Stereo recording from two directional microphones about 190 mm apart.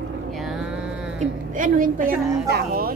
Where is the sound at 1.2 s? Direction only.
45° right (ahead or behind).